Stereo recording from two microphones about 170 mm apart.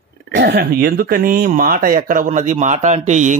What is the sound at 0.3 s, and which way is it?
Speech, 75° right (ahead or behind).